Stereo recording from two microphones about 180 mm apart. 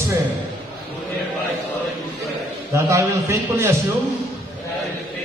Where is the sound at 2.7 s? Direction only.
15° right (ahead or behind).